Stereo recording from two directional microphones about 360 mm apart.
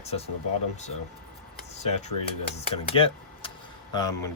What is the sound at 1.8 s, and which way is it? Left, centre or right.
Speech, centre.